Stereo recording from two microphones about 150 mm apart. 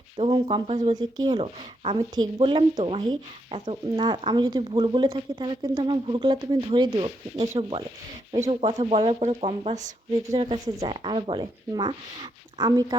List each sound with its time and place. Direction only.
0.4 s speech: 40° right (ahead or behind)
1.8 s speech: 40° right (ahead or behind)